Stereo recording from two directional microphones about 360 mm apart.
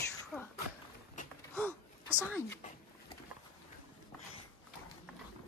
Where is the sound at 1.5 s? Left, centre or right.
Centre.